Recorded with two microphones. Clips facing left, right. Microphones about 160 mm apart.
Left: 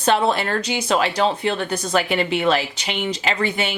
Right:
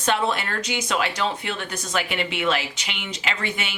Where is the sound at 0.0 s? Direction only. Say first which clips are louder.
Left 5 dB; 30° left (ahead or behind).